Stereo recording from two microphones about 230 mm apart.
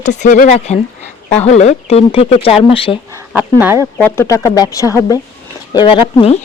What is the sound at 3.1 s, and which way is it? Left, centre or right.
Chicken, centre.